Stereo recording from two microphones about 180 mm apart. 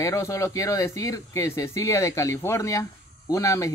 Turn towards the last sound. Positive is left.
turn(degrees=20)  # may be behind; listen again after turning